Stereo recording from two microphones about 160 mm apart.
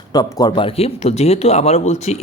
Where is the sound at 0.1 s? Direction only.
25° left (ahead or behind).